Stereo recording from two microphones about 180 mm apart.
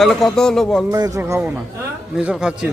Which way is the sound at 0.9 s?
20° right (ahead or behind).